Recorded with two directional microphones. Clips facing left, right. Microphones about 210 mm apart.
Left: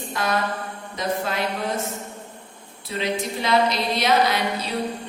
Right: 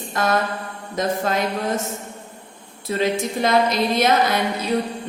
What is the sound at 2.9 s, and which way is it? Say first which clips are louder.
A woman's voice: right 5 dB; 45° right (ahead or behind).